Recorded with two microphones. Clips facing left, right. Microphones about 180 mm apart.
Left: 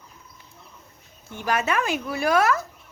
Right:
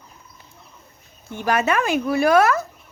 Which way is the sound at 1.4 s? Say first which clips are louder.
Right 4 dB; 55° right (ahead or behind).